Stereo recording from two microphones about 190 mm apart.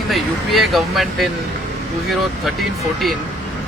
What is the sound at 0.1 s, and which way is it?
Speech, centre (ahead or behind).